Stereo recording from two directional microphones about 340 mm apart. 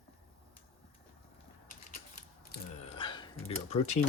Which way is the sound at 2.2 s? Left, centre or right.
Centre.